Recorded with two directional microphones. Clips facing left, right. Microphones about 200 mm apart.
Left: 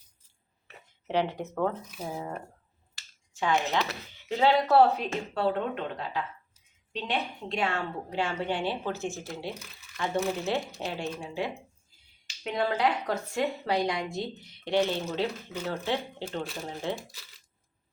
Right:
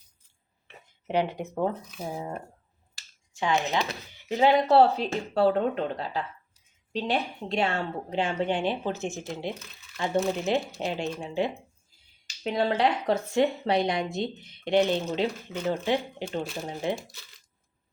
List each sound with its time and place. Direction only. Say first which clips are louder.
1.0 s speech: right 1 dB; 15° right (ahead or behind)
3.3 s speech: right 1 dB; 15° right (ahead or behind)